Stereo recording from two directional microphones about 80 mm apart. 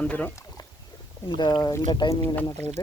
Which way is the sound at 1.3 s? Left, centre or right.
Left.